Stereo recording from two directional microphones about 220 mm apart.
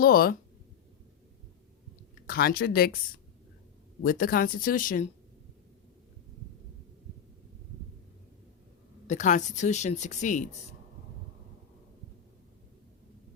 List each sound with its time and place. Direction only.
0.0 s a woman's voice: 40° left (ahead or behind)
2.2 s speech: 45° left (ahead or behind)
4.0 s a woman's voice: 40° left (ahead or behind)
9.0 s a woman's voice: 35° left (ahead or behind)